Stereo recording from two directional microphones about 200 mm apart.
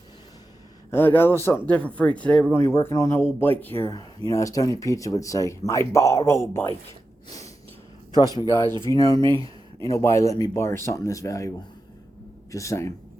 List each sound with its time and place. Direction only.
0.9 s speech: 10° left (ahead or behind)
7.3 s snort: 15° left (ahead or behind)
8.9 s speech: 20° left (ahead or behind)